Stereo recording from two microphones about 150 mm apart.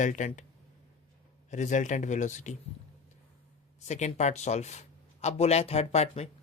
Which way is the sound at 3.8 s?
50° left (ahead or behind).